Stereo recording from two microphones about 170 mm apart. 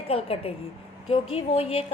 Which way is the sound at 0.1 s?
35° left (ahead or behind).